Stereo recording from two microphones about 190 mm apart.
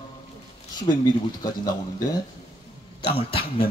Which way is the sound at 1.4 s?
20° left (ahead or behind).